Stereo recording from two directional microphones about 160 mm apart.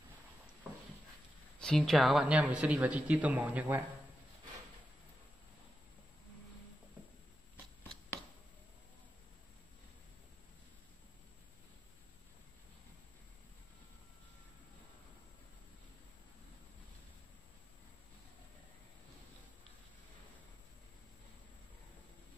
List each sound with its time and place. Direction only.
1.6 s speech: 5° left (ahead or behind)